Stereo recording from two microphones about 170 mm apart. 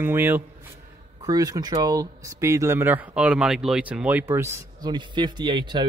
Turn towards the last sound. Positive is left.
turn(degrees=-25)  # may be behind; listen again after turning